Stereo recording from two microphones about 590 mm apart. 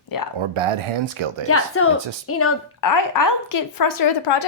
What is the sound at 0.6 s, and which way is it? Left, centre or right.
Speech, right.